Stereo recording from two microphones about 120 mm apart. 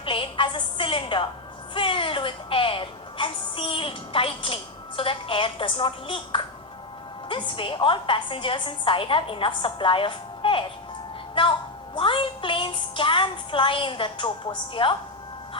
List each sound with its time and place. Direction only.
0.0 s a woman's voice: 45° left (ahead or behind)